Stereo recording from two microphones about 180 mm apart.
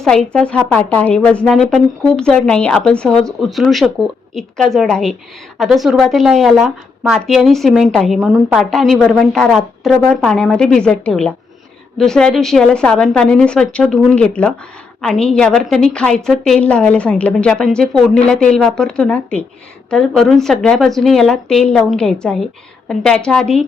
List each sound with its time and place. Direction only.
0.0 s a woman's voice: 5° left (ahead or behind)